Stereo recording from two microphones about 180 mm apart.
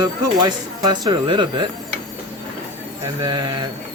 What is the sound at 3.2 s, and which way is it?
Speech, 25° right (ahead or behind).